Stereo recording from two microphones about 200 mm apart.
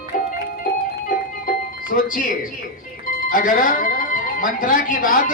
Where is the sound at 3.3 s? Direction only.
45° left (ahead or behind).